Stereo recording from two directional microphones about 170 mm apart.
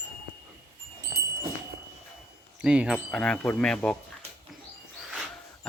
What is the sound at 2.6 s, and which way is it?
Wind chime, 5° right (ahead or behind).